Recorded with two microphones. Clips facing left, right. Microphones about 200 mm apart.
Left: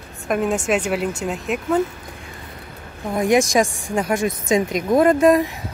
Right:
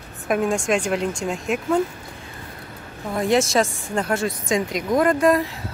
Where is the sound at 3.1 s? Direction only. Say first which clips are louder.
Left 2 dB; 15° left (ahead or behind).